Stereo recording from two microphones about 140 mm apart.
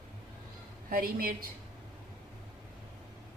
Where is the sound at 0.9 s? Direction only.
90° right.